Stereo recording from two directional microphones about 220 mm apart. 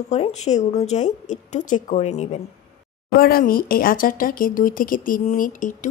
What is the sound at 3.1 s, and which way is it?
Speech, 40° left (ahead or behind).